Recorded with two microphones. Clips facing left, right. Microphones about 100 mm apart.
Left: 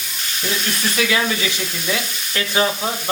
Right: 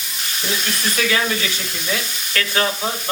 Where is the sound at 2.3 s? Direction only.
15° left (ahead or behind).